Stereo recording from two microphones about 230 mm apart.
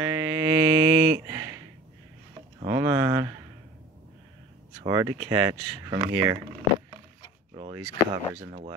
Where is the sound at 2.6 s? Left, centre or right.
Centre.